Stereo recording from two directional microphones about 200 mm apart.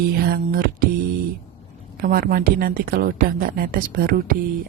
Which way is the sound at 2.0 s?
45° right (ahead or behind).